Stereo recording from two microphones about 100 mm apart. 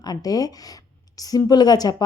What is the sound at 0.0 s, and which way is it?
A woman's voice, 40° left (ahead or behind).